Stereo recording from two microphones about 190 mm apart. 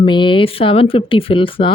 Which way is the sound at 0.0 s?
25° left (ahead or behind).